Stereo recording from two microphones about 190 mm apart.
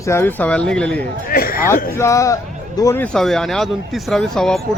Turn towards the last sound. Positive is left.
turn(degrees=5)  # may be behind; listen again after turning